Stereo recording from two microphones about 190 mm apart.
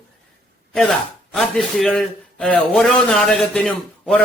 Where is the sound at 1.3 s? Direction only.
Centre (ahead or behind).